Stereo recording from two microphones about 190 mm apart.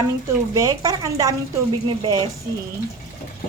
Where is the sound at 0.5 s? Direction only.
20° right (ahead or behind).